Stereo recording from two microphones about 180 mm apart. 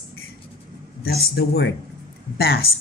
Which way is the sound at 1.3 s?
65° left (ahead or behind).